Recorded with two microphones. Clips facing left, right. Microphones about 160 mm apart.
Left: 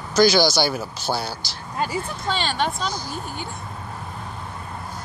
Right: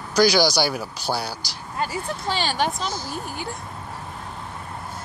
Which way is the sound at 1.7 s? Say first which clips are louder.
Left 2 dB; 20° left (ahead or behind).